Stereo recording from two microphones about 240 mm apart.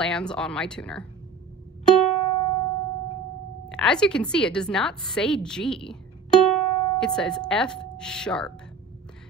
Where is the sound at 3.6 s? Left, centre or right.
Centre.